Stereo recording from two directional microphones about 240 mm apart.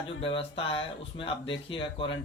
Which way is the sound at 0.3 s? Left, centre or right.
Left.